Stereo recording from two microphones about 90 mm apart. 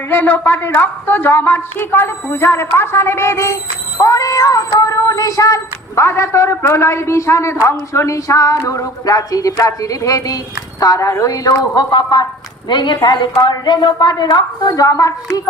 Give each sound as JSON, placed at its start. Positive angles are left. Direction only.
{"t": 0.1, "sound": "a woman's voice", "side_deg": 20}
{"t": 4.0, "sound": "cat", "side_deg": 40}
{"t": 6.0, "sound": "a man's voice", "side_deg": 30}